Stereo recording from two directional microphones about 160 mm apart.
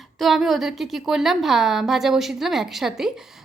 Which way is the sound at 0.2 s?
Centre (ahead or behind).